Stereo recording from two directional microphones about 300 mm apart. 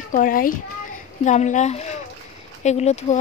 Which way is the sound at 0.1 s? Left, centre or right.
Left.